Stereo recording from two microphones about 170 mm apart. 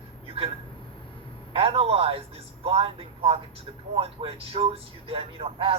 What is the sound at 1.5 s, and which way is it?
Speech, 35° right (ahead or behind).